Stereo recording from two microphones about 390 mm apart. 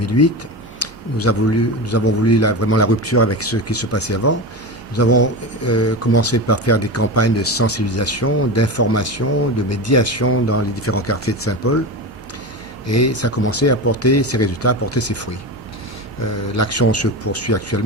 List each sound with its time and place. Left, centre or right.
0.0 s speech: left
0.8 s a sound: left
1.9 s speech: left
12.9 s speech: left
16.6 s speech: left